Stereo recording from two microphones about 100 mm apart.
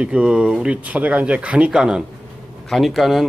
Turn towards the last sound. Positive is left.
turn(degrees=0)  # may be behind; listen again after turning